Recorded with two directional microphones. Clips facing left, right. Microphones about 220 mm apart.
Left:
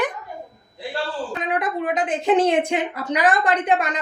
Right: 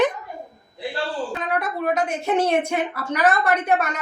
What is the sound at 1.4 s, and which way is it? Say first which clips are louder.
A woman's voice: left 5 dB; 15° left (ahead or behind).